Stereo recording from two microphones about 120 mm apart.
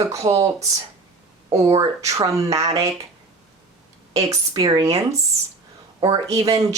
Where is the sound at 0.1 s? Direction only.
25° right (ahead or behind).